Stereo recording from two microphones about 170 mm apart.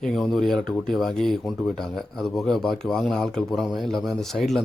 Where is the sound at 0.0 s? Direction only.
Centre (ahead or behind).